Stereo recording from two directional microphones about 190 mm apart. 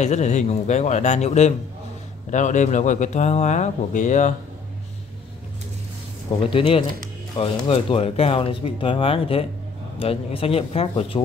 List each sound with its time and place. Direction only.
0.0 s speech: 40° left (ahead or behind)
6.5 s speech: 30° left (ahead or behind)